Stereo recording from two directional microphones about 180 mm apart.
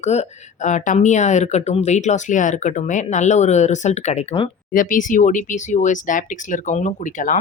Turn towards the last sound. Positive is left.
turn(degrees=45)  # may be behind; listen again after turning